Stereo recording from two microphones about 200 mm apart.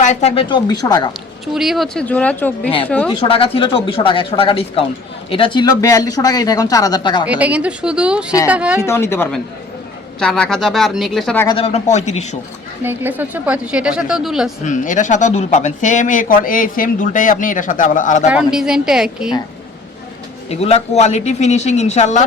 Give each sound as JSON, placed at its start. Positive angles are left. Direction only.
{"t": 0.0, "sound": "speech", "side_deg": 35}
{"t": 1.5, "sound": "speech", "side_deg": 0}
{"t": 3.1, "sound": "speech", "side_deg": 30}
{"t": 7.3, "sound": "speech", "side_deg": -5}
{"t": 8.8, "sound": "speech", "side_deg": 10}
{"t": 11.4, "sound": "speech", "side_deg": 30}
{"t": 12.8, "sound": "speech", "side_deg": -10}
{"t": 14.6, "sound": "speech", "side_deg": 40}
{"t": 18.3, "sound": "speech", "side_deg": -5}
{"t": 20.5, "sound": "speech", "side_deg": 30}